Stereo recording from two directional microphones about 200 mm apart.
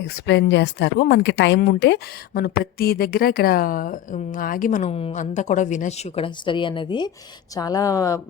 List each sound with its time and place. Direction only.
0.3 s speech: 60° left (ahead or behind); by 4.9 s 40° left (ahead or behind)
4.9 s a woman's voice: 30° left (ahead or behind)